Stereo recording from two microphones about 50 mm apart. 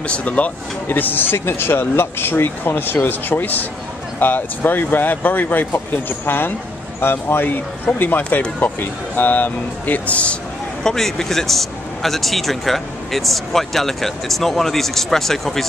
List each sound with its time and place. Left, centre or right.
0.0 s speech: left
0.8 s speech: left
10.8 s a man's voice: centre